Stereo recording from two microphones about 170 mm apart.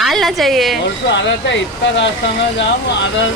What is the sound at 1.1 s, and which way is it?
Speech, 90° left.